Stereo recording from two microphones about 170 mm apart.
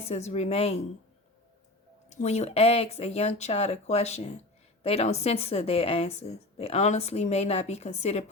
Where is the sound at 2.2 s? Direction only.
40° left (ahead or behind).